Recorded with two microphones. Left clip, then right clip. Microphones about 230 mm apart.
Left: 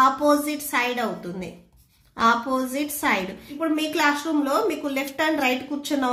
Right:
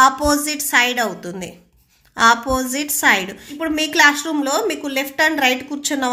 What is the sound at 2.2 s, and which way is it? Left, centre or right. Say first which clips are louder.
A woman's voice: right 6 dB; right.